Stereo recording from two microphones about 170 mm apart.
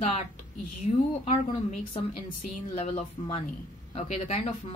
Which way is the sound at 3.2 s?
30° left (ahead or behind).